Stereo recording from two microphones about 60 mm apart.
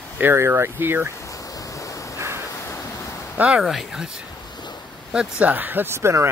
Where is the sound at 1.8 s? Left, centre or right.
Left.